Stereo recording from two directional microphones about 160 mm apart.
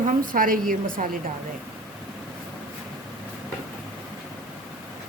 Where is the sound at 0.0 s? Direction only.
60° right (ahead or behind).